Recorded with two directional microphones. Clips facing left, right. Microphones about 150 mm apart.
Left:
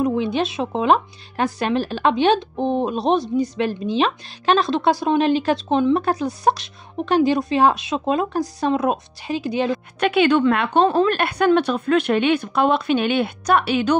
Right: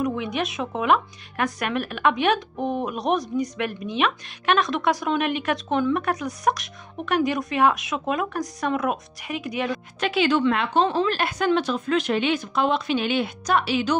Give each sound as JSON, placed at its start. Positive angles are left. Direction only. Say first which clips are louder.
{"t": 0.0, "sound": "speech", "louder": "left 5 dB", "side_deg": 30}
{"t": 9.9, "sound": "a woman's voice", "louder": "left 5 dB", "side_deg": 60}